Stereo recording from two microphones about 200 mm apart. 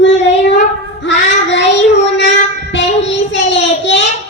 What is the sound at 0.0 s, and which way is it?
Child singing, 65° left (ahead or behind).